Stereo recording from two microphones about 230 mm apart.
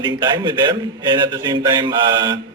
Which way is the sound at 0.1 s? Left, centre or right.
Centre.